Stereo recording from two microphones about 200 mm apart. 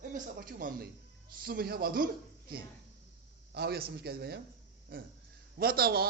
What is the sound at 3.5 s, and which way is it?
Speech, 50° right (ahead or behind).